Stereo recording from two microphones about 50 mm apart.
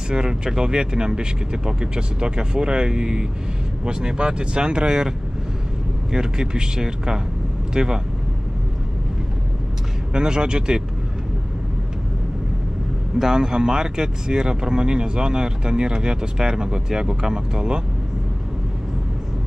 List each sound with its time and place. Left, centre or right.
0.1 s speech: centre
6.1 s speech: centre
10.1 s speech: centre
13.2 s speech: centre